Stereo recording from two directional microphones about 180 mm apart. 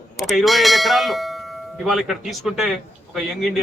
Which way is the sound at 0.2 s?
Centre (ahead or behind).